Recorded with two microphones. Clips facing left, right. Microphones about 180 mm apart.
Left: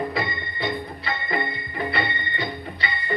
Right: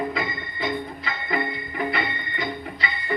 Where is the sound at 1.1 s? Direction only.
40° left (ahead or behind).